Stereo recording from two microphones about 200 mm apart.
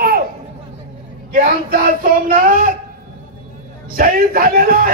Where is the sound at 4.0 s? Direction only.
45° right (ahead or behind).